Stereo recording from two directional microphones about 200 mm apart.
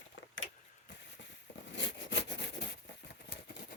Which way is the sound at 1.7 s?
65° left (ahead or behind).